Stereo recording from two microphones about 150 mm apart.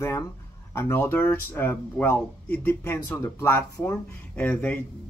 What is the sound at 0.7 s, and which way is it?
Speech, 15° left (ahead or behind).